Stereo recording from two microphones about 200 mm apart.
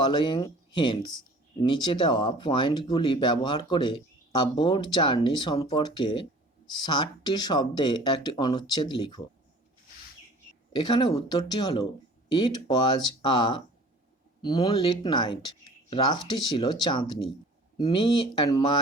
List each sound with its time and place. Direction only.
0.0 s speech: 25° left (ahead or behind)
10.7 s speech: 25° left (ahead or behind)